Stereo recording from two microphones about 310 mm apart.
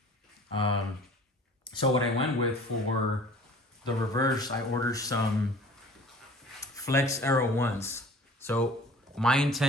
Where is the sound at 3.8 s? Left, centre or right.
Centre.